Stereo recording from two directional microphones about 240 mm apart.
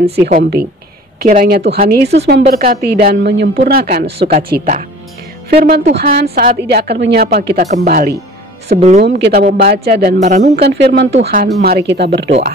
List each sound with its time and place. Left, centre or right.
0.1 s a woman's voice: right
5.5 s a woman's voice: right
9.0 s a woman's voice: right
10.5 s speech: right